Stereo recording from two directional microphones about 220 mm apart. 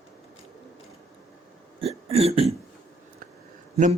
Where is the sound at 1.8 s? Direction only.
25° right (ahead or behind).